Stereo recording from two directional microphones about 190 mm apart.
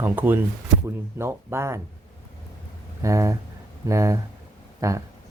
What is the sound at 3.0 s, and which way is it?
Speech, 15° right (ahead or behind).